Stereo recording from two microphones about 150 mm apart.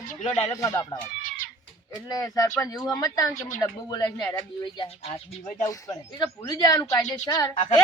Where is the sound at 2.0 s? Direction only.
25° left (ahead or behind).